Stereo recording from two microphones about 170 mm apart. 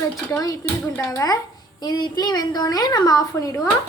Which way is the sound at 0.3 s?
20° left (ahead or behind).